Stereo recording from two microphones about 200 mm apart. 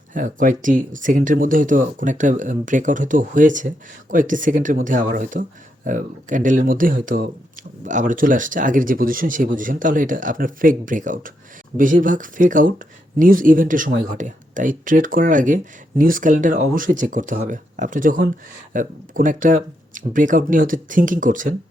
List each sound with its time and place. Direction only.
0.1 s speech: 40° right (ahead or behind)